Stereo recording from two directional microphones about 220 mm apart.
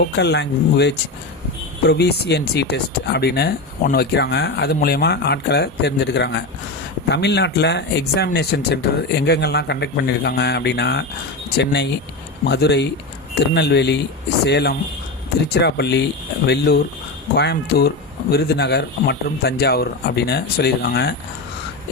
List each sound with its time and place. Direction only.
0.0 s speech: 50° left (ahead or behind)